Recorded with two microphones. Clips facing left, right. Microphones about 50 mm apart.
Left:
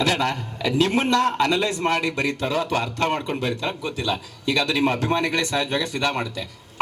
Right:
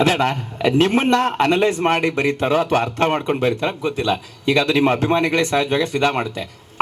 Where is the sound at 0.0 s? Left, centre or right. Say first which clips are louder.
Right 5 dB; right.